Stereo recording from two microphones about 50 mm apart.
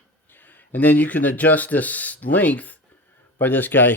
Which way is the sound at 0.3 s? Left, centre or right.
Left.